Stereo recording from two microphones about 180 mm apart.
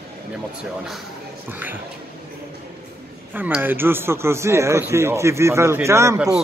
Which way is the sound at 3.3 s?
10° right (ahead or behind).